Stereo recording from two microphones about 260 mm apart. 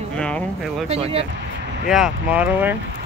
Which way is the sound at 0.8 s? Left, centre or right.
Right.